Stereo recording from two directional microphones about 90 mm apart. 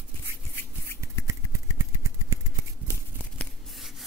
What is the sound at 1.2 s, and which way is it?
Vehicle, 35° right (ahead or behind).